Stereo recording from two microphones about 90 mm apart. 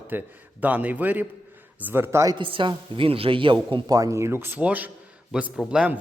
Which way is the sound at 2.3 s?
70° right (ahead or behind).